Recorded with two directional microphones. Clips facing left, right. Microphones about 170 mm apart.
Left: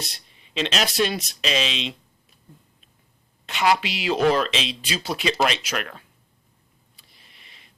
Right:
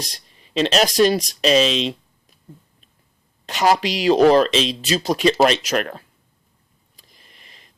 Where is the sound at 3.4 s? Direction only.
40° right (ahead or behind).